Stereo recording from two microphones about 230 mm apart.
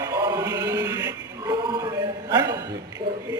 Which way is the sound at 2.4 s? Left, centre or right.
Centre.